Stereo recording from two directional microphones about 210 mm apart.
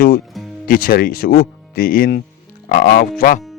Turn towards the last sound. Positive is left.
turn(degrees=40)  # may be behind; listen again after turning